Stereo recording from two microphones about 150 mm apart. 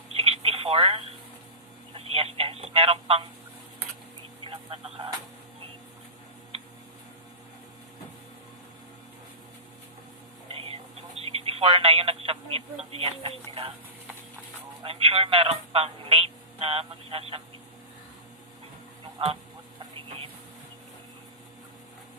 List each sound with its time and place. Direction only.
0.2 s telephone: 40° right (ahead or behind)
2.0 s speech: 40° right (ahead or behind)
4.4 s speech: 40° right (ahead or behind)
10.7 s telephone: 40° right (ahead or behind)
12.9 s speech: 40° right (ahead or behind)
14.8 s speech: 40° right (ahead or behind)
19.2 s speech: 40° right (ahead or behind)